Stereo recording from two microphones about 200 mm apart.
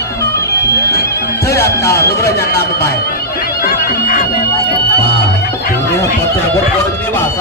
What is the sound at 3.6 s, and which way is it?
Music, 45° left (ahead or behind).